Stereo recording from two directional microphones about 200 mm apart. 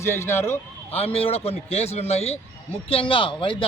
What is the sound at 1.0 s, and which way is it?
Speech, 30° left (ahead or behind).